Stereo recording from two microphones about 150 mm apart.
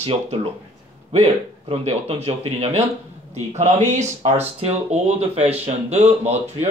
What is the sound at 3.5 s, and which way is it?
Speech, 50° right (ahead or behind).